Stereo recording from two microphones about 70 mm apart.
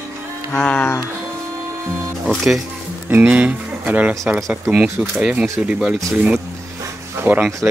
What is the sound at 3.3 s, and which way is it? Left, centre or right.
Speech, centre.